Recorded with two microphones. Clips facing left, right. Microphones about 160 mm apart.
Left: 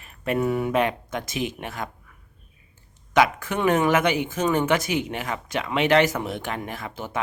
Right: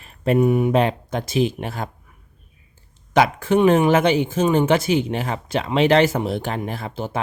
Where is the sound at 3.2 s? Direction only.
30° right (ahead or behind).